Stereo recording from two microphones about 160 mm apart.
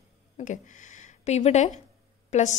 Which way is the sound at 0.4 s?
50° left (ahead or behind).